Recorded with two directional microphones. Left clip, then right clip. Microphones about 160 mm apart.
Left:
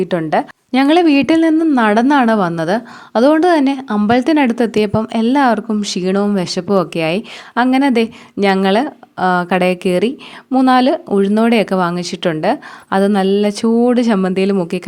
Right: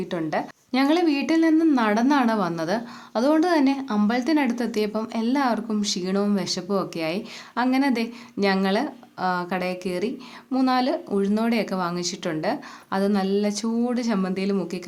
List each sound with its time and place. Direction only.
0.0 s a woman's voice: 50° left (ahead or behind)